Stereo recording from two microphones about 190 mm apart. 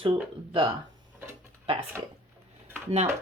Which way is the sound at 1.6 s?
30° right (ahead or behind).